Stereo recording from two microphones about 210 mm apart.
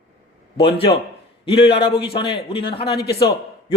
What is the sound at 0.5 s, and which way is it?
A man's voice, 25° left (ahead or behind).